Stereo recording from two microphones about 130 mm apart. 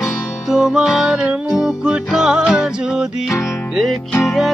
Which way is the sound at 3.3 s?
25° left (ahead or behind).